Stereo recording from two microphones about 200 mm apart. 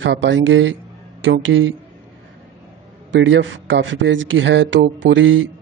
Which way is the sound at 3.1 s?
65° right (ahead or behind).